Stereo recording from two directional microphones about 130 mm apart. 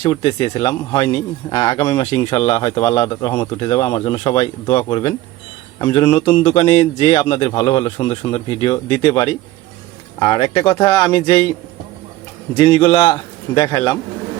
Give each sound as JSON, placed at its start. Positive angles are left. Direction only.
{"t": 0.0, "sound": "a man's voice", "side_deg": 45}
{"t": 3.1, "sound": "speech", "side_deg": 30}
{"t": 3.6, "sound": "a man's voice", "side_deg": 45}
{"t": 6.6, "sound": "a man's voice", "side_deg": 60}
{"t": 12.5, "sound": "speech", "side_deg": 35}
{"t": 13.1, "sound": "a man's voice", "side_deg": 35}